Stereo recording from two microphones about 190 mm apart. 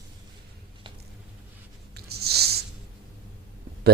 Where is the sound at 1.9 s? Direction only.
55° right (ahead or behind).